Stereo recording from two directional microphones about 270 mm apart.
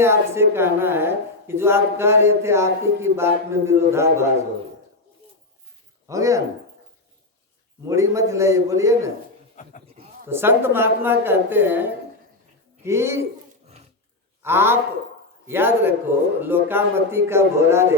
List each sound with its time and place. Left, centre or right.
0.0 s a woman's voice: centre
6.1 s a woman's voice: centre
7.9 s a woman's voice: centre
9.6 s a sound: left
10.2 s a woman's voice: centre
14.4 s a woman's voice: centre